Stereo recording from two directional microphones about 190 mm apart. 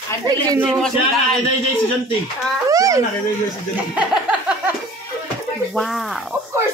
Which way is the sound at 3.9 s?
5° right (ahead or behind).